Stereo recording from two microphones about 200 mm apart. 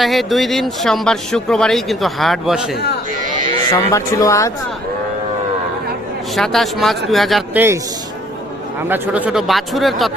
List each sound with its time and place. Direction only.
0.0 s speech: centre (ahead or behind)
3.7 s speech: 15° left (ahead or behind)
6.3 s speech: centre (ahead or behind)
8.9 s speech: 5° right (ahead or behind)